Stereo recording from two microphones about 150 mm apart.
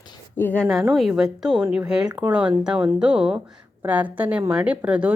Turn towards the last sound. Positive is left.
turn(degrees=-10)  # may be behind; listen again after turning